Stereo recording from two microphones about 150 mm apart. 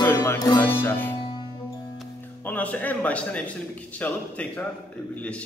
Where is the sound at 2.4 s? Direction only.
10° left (ahead or behind).